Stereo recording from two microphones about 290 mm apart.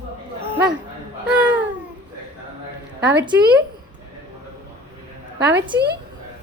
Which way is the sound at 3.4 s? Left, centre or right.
Right.